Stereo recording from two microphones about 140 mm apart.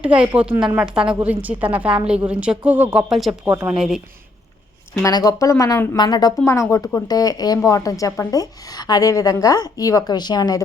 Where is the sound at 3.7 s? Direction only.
5° right (ahead or behind).